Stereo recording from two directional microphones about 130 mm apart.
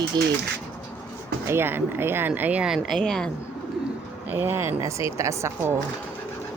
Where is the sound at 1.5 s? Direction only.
20° right (ahead or behind); by 3.2 s 5° left (ahead or behind).